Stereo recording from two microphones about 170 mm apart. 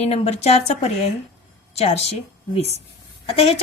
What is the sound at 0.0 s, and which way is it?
A woman's voice, 40° left (ahead or behind).